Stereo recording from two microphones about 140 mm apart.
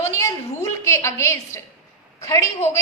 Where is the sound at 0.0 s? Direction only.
20° left (ahead or behind).